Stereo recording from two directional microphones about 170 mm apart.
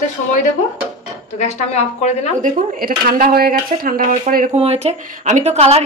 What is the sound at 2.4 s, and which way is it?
A woman's voice, 60° right (ahead or behind).